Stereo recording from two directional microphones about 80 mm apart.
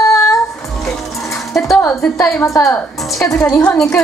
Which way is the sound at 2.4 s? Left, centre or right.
Left.